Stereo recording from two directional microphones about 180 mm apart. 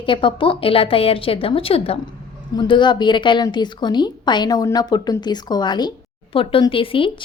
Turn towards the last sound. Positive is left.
turn(degrees=30)  # may be behind; listen again after turning